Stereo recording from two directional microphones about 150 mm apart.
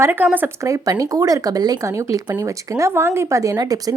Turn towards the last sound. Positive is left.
turn(degrees=-25)  # may be behind; listen again after turning